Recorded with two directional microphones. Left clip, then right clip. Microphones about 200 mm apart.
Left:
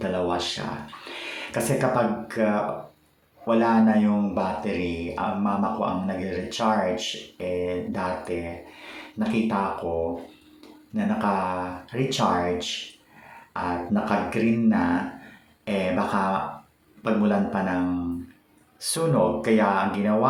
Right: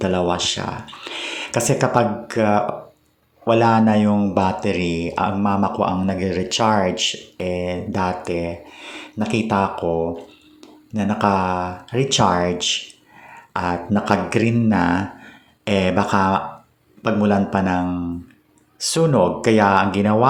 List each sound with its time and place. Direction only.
0.0 s speech: 35° right (ahead or behind)
10.9 s speech: 35° right (ahead or behind)